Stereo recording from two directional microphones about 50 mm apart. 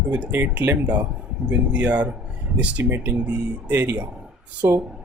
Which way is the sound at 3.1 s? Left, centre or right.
Right.